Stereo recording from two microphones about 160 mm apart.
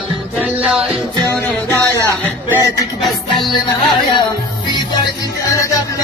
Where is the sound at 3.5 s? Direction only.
30° left (ahead or behind).